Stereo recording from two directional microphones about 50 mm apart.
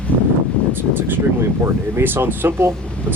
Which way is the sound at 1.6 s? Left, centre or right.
Right.